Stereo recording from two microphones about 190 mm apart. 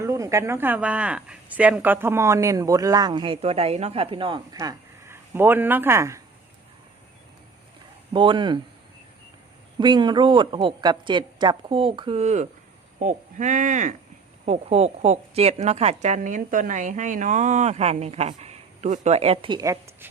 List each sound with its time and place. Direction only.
0.0 s speech: 15° right (ahead or behind)
4.5 s speech: 15° right (ahead or behind)
8.1 s a woman's voice: 25° right (ahead or behind)
9.7 s a woman's voice: 25° right (ahead or behind)